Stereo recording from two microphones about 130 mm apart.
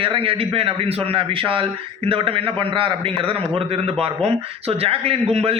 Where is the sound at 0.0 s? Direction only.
45° right (ahead or behind).